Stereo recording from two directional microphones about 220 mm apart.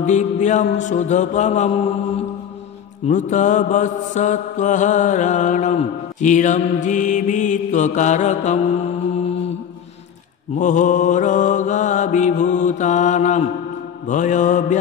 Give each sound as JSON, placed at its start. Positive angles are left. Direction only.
{"t": 0.0, "sound": "mantra", "side_deg": 35}
{"t": 10.6, "sound": "mantra", "side_deg": 35}